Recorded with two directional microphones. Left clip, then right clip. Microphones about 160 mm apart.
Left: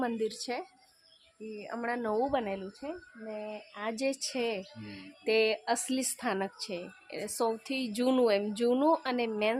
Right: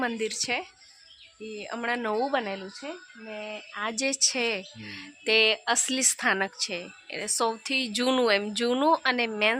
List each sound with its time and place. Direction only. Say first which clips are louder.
0.0 s speech: right 4 dB; 15° right (ahead or behind)
1.5 s speech: right 5 dB; 35° right (ahead or behind)
2.3 s speech: right 3 dB; 10° right (ahead or behind)